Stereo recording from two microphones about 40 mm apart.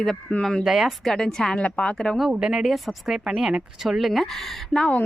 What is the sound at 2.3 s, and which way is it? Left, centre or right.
Speech, right.